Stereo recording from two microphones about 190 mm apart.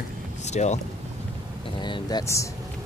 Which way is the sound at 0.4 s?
35° left (ahead or behind).